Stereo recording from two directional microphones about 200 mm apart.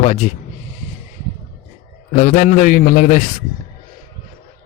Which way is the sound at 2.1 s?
40° left (ahead or behind).